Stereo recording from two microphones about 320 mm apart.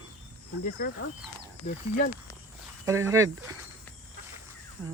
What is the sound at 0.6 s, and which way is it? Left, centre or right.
Speech, left.